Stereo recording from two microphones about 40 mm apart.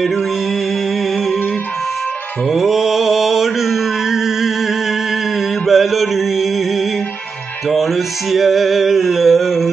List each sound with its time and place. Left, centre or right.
2.5 s mantra: centre
5.7 s mantra: centre
7.7 s music: centre